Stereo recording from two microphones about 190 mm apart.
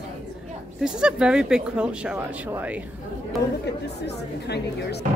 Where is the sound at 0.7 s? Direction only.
5° right (ahead or behind).